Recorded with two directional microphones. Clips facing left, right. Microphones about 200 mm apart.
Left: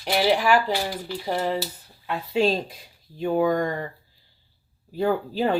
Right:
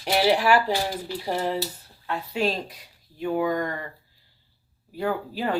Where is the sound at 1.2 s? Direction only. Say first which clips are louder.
Left 1 dB; 5° right (ahead or behind).